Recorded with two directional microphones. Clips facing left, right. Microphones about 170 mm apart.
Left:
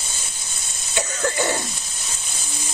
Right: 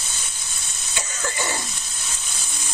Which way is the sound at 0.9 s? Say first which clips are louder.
Left 6 dB; 55° left (ahead or behind).